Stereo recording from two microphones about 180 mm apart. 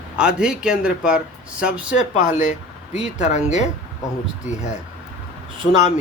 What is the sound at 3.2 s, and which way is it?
Speech, 40° left (ahead or behind).